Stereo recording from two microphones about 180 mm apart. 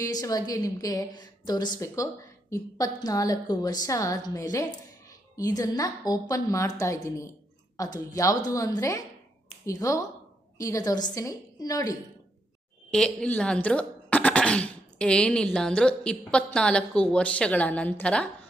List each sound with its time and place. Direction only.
0.0 s a woman's voice: 20° left (ahead or behind)
12.9 s speech: 5° left (ahead or behind)